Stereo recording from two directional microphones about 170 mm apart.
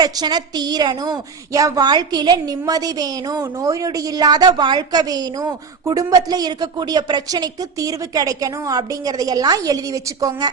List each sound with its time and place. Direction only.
0.0 s a woman's voice: 25° right (ahead or behind)